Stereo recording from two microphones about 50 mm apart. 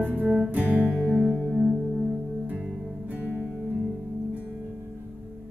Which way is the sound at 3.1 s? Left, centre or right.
Right.